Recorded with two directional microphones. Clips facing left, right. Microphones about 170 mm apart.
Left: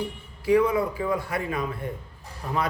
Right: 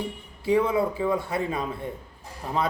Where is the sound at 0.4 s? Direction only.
25° right (ahead or behind).